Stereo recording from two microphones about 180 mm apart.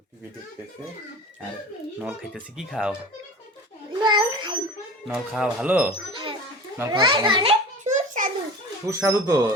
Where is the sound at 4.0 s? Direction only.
25° right (ahead or behind).